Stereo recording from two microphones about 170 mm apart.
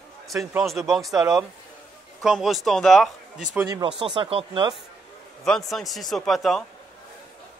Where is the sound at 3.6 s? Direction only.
25° right (ahead or behind).